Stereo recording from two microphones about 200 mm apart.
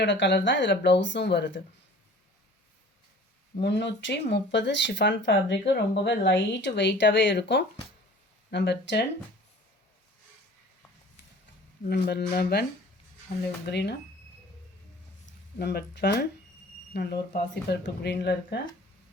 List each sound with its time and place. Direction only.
0.0 s speech: 65° left (ahead or behind)
3.6 s speech: 60° left (ahead or behind)
11.9 s speech: 50° left (ahead or behind)
13.7 s speech: 55° left (ahead or behind)
15.3 s speech: 55° left (ahead or behind)